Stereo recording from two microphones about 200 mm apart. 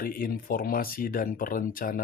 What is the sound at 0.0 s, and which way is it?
Speech, 45° left (ahead or behind).